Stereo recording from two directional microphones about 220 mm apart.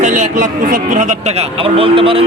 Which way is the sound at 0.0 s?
35° right (ahead or behind).